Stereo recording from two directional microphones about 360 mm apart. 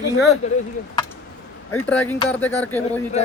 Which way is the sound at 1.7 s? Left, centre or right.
Centre.